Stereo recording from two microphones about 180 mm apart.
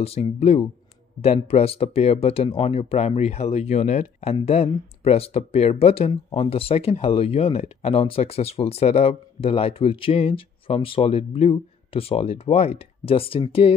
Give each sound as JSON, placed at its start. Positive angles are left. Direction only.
{"t": 0.0, "sound": "speech", "side_deg": 35}